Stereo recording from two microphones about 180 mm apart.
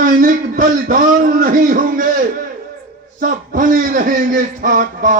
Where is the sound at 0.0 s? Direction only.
50° right (ahead or behind).